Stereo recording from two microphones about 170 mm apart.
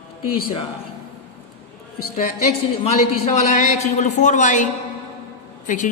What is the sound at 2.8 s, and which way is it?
A man's voice, 40° left (ahead or behind).